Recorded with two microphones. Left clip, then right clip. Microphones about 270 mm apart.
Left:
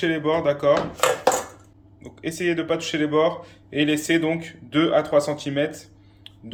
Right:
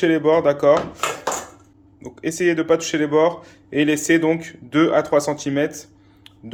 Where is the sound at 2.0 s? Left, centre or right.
Centre.